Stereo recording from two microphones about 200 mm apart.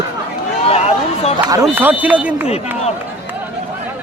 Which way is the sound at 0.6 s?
30° left (ahead or behind).